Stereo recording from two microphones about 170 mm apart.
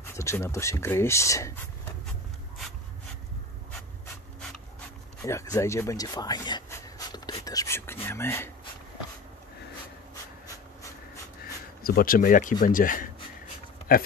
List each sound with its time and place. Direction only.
0.1 s speech: 15° left (ahead or behind)
5.2 s speech: 20° left (ahead or behind)
11.8 s speech: 60° left (ahead or behind)